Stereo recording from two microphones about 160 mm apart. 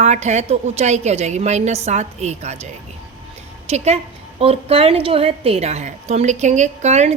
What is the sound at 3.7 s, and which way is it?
A woman's voice, 40° right (ahead or behind).